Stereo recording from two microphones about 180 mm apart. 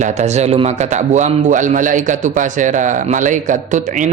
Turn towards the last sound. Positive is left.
turn(degrees=-40)  # may be behind; listen again after turning